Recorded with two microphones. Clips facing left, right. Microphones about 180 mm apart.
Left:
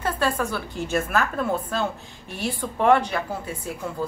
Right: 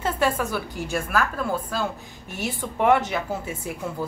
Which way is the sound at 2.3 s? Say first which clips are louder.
Left 1 dB; 15° right (ahead or behind).